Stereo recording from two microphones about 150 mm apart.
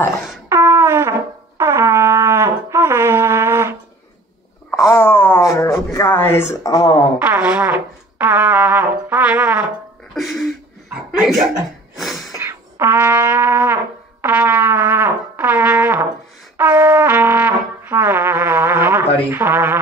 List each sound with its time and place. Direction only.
0.5 s music: 15° right (ahead or behind)
1.6 s brass instrument: 15° right (ahead or behind)
4.6 s a sound: 20° left (ahead or behind)
7.2 s music: 10° right (ahead or behind)
10.1 s a sound: centre (ahead or behind)
12.0 s gasp: centre (ahead or behind)
12.4 s music: 15° right (ahead or behind)
14.2 s brass instrument: 10° right (ahead or behind)
19.3 s a sound: 15° right (ahead or behind)